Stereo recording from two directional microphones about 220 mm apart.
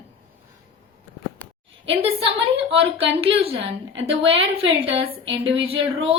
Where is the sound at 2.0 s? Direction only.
25° right (ahead or behind).